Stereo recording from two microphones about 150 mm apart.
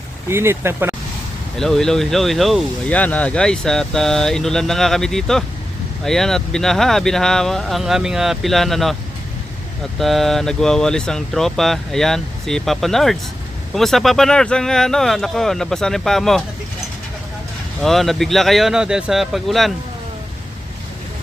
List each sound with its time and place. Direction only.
0.3 s speech: 15° right (ahead or behind)
1.5 s speech: 5° left (ahead or behind)
10.0 s speech: centre (ahead or behind)
17.8 s speech: centre (ahead or behind)